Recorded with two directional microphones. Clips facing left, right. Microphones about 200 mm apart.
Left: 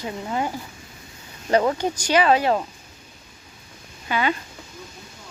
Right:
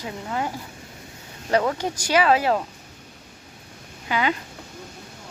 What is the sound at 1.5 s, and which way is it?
Speech, 5° left (ahead or behind).